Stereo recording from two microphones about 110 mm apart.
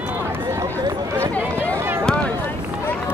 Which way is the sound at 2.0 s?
10° left (ahead or behind).